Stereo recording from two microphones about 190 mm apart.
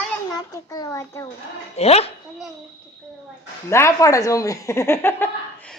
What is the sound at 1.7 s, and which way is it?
Speech, 35° left (ahead or behind).